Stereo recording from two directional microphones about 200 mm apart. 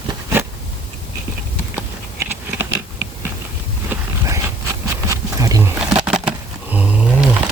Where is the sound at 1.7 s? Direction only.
10° right (ahead or behind).